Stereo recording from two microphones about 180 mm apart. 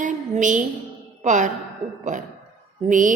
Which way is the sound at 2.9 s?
45° right (ahead or behind).